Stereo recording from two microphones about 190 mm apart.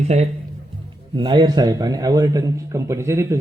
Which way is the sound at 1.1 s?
25° right (ahead or behind).